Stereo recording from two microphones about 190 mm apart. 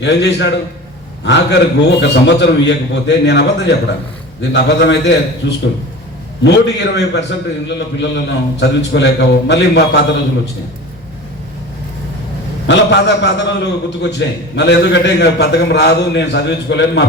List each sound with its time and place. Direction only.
0.0 s a man's voice: 65° left (ahead or behind)
12.6 s a man's voice: 65° left (ahead or behind)